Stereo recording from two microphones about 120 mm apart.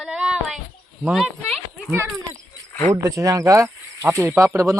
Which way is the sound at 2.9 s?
25° right (ahead or behind).